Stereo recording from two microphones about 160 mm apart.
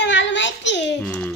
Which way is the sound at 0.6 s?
90° left.